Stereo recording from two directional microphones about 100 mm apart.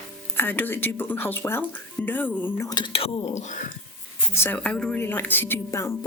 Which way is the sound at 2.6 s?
40° left (ahead or behind).